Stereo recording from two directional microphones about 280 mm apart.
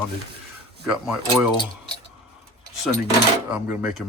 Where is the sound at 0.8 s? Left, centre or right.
Centre.